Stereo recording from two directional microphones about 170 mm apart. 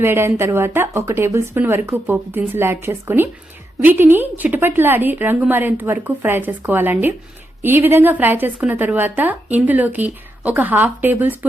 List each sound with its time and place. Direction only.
0.0 s a woman's voice: 15° right (ahead or behind)